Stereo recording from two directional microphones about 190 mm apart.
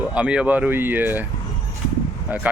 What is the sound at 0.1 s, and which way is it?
Speech, 5° right (ahead or behind).